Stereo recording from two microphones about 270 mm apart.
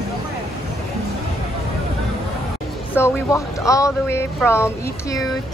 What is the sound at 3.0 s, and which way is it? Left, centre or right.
Speech, centre.